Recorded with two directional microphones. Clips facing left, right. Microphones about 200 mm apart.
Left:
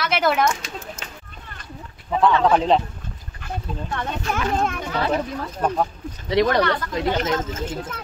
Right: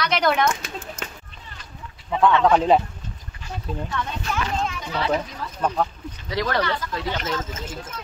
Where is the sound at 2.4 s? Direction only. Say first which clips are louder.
Even; centre (ahead or behind).